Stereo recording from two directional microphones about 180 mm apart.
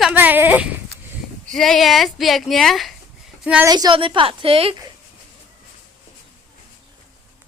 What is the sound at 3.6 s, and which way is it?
A woman's voice, 20° right (ahead or behind).